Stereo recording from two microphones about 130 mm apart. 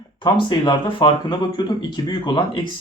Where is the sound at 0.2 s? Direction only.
35° left (ahead or behind).